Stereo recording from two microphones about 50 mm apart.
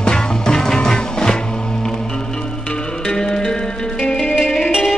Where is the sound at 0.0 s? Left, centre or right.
Centre.